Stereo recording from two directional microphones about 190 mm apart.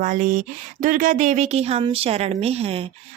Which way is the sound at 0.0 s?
45° right (ahead or behind).